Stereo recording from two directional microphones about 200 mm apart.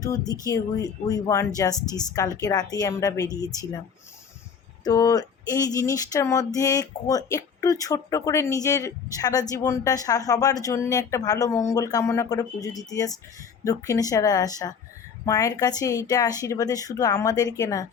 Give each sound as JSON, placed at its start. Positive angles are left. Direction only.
{"t": 0.3, "sound": "speech", "side_deg": 20}
{"t": 4.8, "sound": "speech", "side_deg": 20}